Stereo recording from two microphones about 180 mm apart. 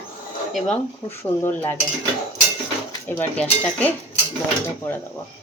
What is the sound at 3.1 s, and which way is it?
Speech, 10° left (ahead or behind).